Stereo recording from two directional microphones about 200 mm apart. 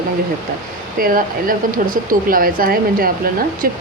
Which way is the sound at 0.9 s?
45° right (ahead or behind).